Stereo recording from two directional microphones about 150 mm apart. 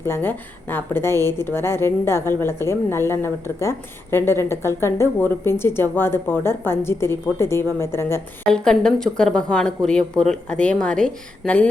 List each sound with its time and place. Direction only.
0.0 s a woman's voice: 15° left (ahead or behind)
8.4 s a woman's voice: 5° left (ahead or behind)